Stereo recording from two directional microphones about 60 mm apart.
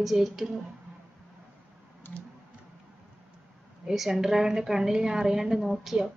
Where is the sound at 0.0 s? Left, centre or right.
Centre.